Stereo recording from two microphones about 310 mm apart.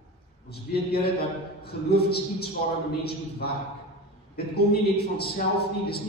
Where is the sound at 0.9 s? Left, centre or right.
Left.